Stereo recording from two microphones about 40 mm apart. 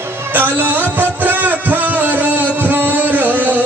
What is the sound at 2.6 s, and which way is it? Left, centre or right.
Music, right.